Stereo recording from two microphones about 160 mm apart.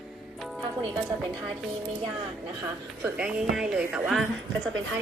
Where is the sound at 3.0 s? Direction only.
5° right (ahead or behind).